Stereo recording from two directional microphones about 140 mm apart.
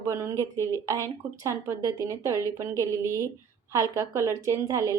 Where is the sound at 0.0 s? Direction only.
20° right (ahead or behind).